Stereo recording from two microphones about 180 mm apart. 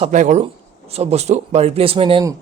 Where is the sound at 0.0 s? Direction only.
40° right (ahead or behind).